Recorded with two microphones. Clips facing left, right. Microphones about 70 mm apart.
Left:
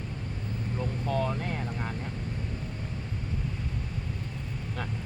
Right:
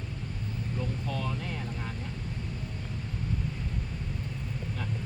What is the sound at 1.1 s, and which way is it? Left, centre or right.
Speech, left.